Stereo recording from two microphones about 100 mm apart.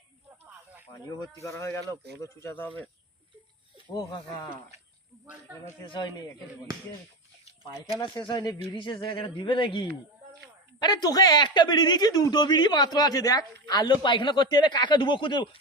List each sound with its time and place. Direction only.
1.4 s speech: 30° left (ahead or behind)
3.9 s speech: 55° left (ahead or behind)
5.2 s speech: 20° right (ahead or behind)
5.8 s speech: 50° left (ahead or behind)
7.9 s speech: 35° left (ahead or behind)
8.2 s speech: 50° left (ahead or behind)
10.8 s speech: 45° left (ahead or behind)